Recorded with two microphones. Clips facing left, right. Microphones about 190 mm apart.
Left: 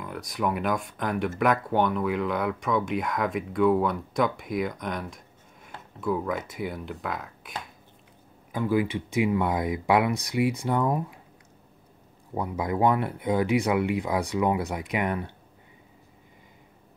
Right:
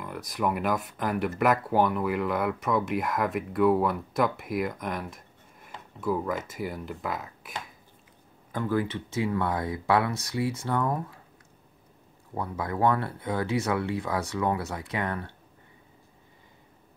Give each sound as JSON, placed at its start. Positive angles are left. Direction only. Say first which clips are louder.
{"t": 0.0, "sound": "speech", "louder": "even", "side_deg": 0}
{"t": 8.5, "sound": "speech", "louder": "left 3 dB", "side_deg": 10}
{"t": 12.4, "sound": "speech", "louder": "left 3 dB", "side_deg": 15}